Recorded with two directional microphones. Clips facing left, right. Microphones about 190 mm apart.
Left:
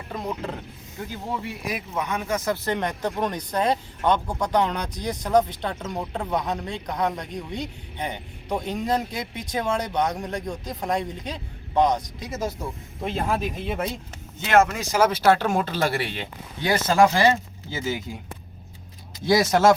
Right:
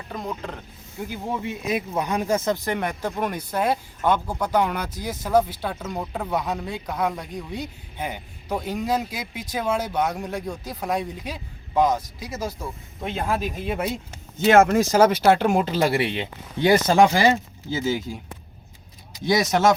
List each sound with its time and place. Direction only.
0.9 s speech: 15° right (ahead or behind)
14.4 s speech: 50° right (ahead or behind)
14.9 s speech: 25° right (ahead or behind)
17.7 s speech: 20° left (ahead or behind)